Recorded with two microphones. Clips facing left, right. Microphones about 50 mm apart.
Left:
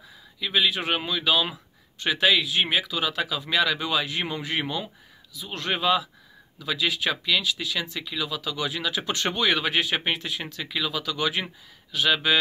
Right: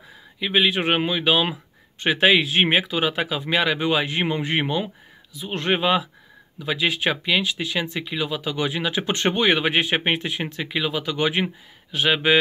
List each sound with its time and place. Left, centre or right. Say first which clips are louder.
0.4 s speech: right 4 dB; right